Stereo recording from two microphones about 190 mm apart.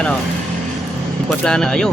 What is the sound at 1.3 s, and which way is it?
Speech, 5° left (ahead or behind).